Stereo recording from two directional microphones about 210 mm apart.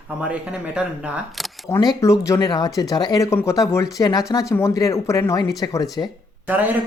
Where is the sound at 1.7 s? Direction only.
15° left (ahead or behind).